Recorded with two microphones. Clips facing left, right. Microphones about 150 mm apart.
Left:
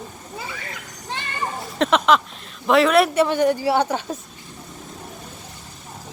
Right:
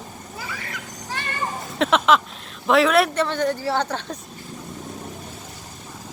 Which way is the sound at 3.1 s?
10° left (ahead or behind).